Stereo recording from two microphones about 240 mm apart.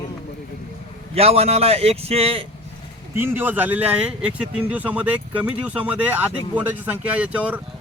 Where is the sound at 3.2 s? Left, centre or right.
Centre.